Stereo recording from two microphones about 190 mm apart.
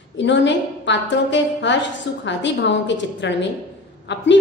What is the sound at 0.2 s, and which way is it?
A woman's voice, 70° left (ahead or behind).